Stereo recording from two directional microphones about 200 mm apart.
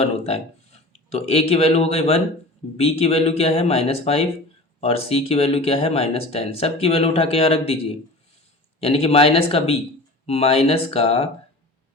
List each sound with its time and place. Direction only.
0.0 s speech: 30° left (ahead or behind)